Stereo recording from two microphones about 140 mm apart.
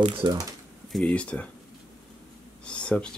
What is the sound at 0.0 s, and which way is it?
Speech, 30° right (ahead or behind).